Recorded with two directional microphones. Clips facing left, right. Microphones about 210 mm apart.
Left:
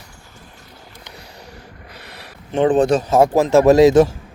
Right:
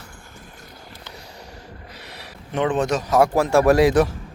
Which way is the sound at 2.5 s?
30° left (ahead or behind).